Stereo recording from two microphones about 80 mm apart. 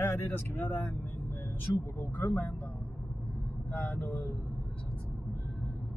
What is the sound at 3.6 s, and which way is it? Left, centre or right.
Speech, left.